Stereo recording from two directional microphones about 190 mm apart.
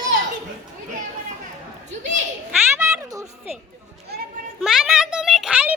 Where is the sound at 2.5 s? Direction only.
10° right (ahead or behind).